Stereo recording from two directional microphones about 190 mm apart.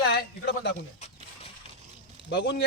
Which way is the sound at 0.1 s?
65° left (ahead or behind).